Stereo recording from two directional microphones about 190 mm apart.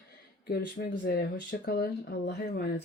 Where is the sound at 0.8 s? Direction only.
60° left (ahead or behind).